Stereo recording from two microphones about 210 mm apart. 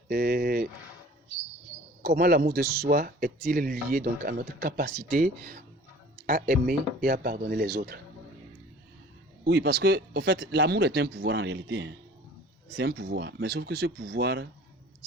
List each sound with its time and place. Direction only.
0.1 s speech: 45° right (ahead or behind)
2.0 s speech: 45° right (ahead or behind)
9.4 s speech: 50° right (ahead or behind)